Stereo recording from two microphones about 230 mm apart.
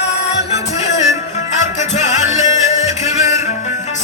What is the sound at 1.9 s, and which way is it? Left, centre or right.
Music, left.